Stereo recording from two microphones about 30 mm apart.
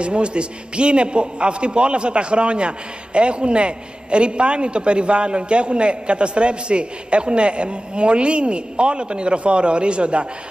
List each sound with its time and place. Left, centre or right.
0.0 s a man's voice: right